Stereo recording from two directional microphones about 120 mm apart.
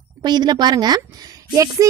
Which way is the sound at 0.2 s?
35° right (ahead or behind).